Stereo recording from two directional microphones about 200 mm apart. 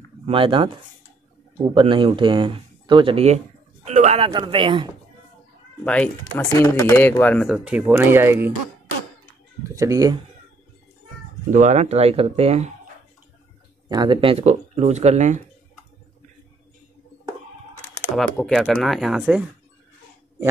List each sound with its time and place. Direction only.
0.3 s speech: 25° right (ahead or behind)
1.7 s a man's voice: 25° right (ahead or behind)
5.9 s speech: 10° left (ahead or behind)
7.4 s speech: 5° right (ahead or behind)
9.6 s speech: 15° right (ahead or behind)
11.5 s speech: 35° right (ahead or behind)
13.8 s speech: 20° right (ahead or behind)
18.0 s speech: 5° left (ahead or behind)